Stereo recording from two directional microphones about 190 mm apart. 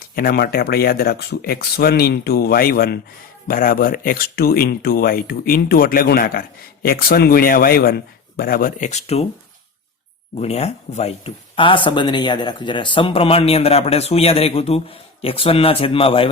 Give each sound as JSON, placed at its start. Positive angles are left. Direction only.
{"t": 0.2, "sound": "speech", "side_deg": 50}
{"t": 10.4, "sound": "speech", "side_deg": 35}